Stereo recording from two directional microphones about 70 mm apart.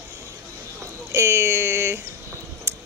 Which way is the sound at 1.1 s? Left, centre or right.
Right.